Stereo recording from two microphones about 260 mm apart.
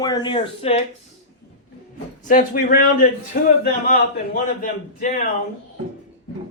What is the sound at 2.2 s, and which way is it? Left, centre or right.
A man's voice, left.